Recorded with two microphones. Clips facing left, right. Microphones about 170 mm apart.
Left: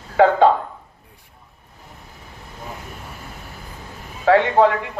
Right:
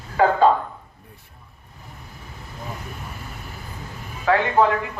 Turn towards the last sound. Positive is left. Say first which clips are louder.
# left 3 dB
turn(degrees=65)  # may be behind; listen again after turning